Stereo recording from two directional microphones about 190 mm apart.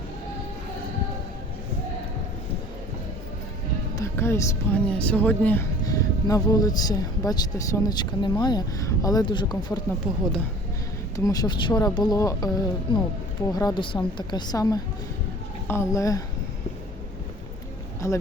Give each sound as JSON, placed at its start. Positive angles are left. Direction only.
{"t": 3.9, "sound": "speech", "side_deg": 15}
{"t": 10.0, "sound": "speech", "side_deg": -5}
{"t": 11.2, "sound": "speech", "side_deg": 20}
{"t": 18.0, "sound": "speech", "side_deg": 15}